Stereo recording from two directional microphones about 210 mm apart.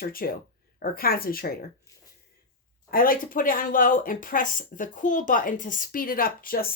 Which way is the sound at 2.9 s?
45° left (ahead or behind).